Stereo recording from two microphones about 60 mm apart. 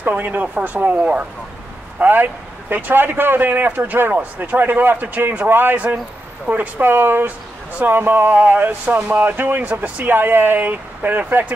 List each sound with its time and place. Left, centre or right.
0.0 s speech: right